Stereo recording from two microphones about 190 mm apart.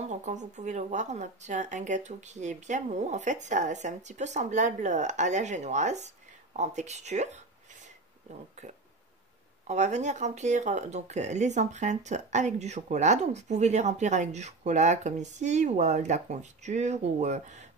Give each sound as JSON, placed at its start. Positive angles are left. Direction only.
{"t": 0.0, "sound": "speech", "side_deg": -35}
{"t": 9.7, "sound": "speech", "side_deg": -35}